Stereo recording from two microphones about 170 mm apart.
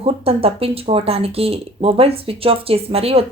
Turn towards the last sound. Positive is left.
turn(degrees=-35)  # may be behind; listen again after turning